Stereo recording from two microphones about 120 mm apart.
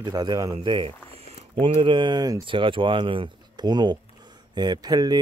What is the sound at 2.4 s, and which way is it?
Speech, 45° right (ahead or behind).